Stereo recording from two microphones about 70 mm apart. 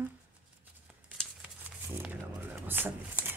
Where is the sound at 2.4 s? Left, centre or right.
Right.